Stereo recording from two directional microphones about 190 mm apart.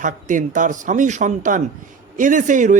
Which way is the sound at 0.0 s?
45° right (ahead or behind).